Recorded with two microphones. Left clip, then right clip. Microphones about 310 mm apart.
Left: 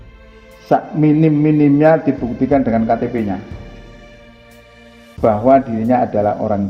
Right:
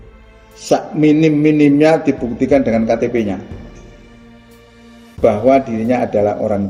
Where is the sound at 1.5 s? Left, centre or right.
Left.